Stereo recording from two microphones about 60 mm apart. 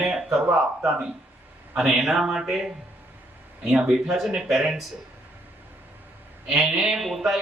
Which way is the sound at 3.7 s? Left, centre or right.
Centre.